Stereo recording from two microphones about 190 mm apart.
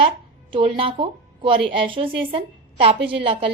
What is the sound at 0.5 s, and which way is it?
A woman's voice, 25° right (ahead or behind).